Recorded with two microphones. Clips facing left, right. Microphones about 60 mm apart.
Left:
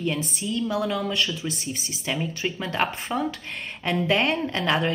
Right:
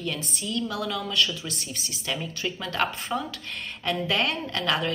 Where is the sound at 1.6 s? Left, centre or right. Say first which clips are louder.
Left 4 dB; centre.